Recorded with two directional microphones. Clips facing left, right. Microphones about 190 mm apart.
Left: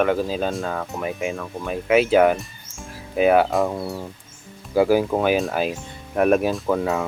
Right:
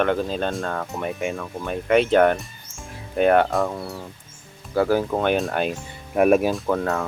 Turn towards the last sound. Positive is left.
turn(degrees=5)  # may be behind; listen again after turning